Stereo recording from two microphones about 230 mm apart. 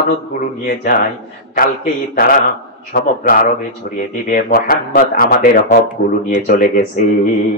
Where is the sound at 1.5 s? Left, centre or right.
Left.